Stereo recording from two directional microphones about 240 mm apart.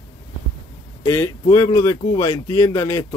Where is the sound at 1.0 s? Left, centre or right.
Centre.